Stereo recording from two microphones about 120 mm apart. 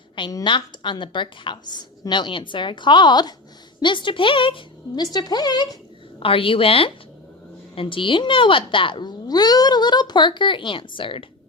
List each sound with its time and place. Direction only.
0.4 s a woman's voice: 40° left (ahead or behind)
6.1 s speech: 50° left (ahead or behind)